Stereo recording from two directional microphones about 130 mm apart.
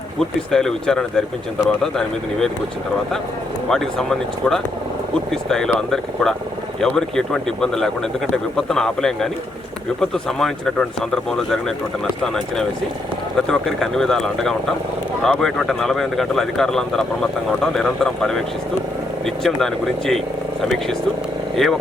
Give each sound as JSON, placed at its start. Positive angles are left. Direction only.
{"t": 0.2, "sound": "speech", "side_deg": 5}
{"t": 3.7, "sound": "speech", "side_deg": 5}